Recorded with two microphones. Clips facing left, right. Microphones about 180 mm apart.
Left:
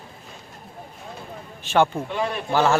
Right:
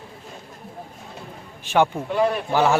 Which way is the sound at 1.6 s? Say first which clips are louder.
Even; 10° right (ahead or behind).